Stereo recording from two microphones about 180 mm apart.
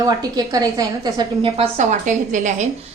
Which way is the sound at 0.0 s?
20° right (ahead or behind).